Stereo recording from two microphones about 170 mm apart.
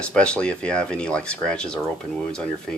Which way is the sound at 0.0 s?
5° left (ahead or behind).